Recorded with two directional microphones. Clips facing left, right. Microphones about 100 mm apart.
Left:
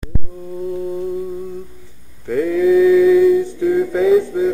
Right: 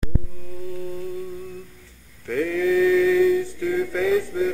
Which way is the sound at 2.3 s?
15° left (ahead or behind).